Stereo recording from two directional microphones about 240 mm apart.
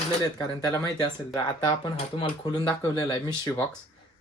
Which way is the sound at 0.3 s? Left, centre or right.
Centre.